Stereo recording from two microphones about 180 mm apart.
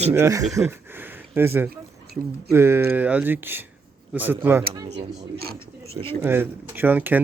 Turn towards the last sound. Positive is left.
turn(degrees=-10)  # may be behind; listen again after turning